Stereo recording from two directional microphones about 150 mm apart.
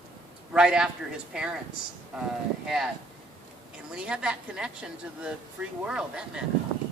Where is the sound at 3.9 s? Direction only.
5° right (ahead or behind).